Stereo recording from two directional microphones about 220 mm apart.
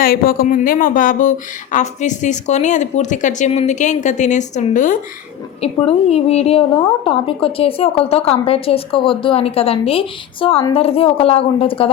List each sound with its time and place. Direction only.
0.0 s a woman's voice: 40° left (ahead or behind); by 11.9 s 25° left (ahead or behind)